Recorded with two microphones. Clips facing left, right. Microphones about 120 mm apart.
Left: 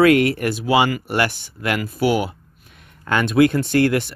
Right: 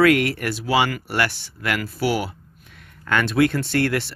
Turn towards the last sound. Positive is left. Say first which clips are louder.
# left 4 dB
turn(degrees=25)  # may be behind; listen again after turning